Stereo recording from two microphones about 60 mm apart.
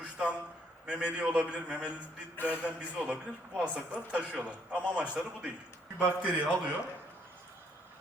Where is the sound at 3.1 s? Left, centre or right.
Centre.